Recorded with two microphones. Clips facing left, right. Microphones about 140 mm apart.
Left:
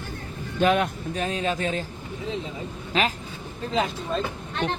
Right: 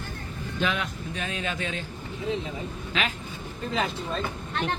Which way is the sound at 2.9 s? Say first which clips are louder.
Left 6 dB; 40° left (ahead or behind).